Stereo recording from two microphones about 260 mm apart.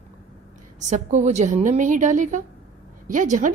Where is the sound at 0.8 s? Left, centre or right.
Right.